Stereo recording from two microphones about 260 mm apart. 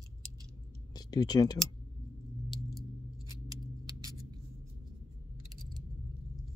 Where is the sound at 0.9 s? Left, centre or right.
Centre.